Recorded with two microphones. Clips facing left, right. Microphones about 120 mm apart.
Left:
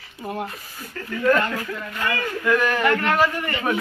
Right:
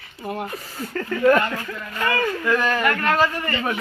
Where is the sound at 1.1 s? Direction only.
55° right (ahead or behind).